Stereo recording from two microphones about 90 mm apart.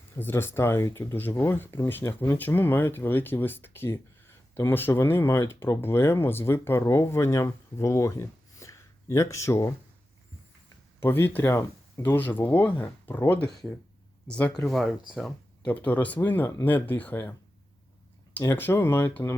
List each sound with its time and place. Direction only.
0.2 s speech: 25° left (ahead or behind)
11.0 s speech: 25° left (ahead or behind)
14.7 s speech: centre (ahead or behind)
15.6 s speech: 15° left (ahead or behind)
18.3 s speech: 20° left (ahead or behind)